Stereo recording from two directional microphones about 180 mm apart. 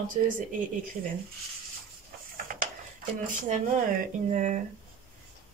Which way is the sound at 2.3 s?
50° right (ahead or behind).